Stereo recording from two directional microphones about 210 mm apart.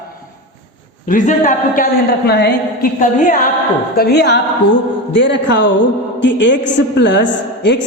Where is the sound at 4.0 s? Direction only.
50° left (ahead or behind).